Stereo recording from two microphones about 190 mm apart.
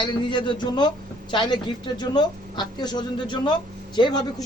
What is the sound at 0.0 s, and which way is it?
A woman's voice, 25° left (ahead or behind).